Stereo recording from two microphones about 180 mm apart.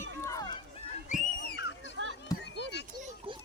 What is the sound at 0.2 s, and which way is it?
Run, 20° left (ahead or behind).